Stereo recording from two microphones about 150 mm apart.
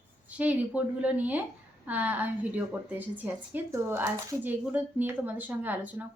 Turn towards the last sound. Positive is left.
turn(degrees=-10)  # may be behind; listen again after turning